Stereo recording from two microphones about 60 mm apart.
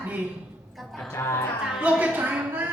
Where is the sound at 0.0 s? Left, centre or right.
Right.